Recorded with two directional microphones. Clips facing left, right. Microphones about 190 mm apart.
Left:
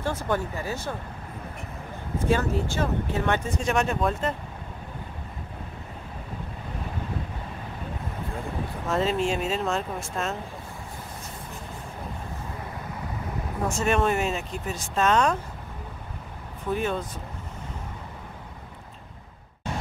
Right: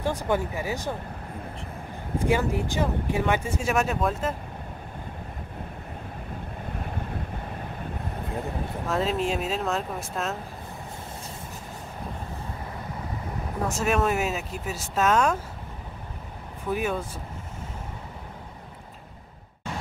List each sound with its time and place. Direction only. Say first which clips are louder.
0.0 s speech: right 1 dB; 15° right (ahead or behind)
2.2 s speech: even; 15° right (ahead or behind)
8.8 s speech: left 1 dB; centre (ahead or behind)
13.7 s speech: left 1 dB; centre (ahead or behind)
16.6 s speech: even; 5° right (ahead or behind)